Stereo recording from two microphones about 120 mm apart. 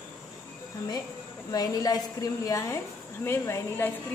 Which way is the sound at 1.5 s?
30° left (ahead or behind).